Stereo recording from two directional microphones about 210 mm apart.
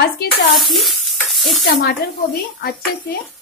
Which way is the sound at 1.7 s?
45° left (ahead or behind).